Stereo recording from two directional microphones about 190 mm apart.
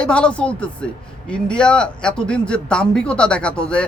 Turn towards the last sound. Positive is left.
turn(degrees=5)  # may be behind; listen again after turning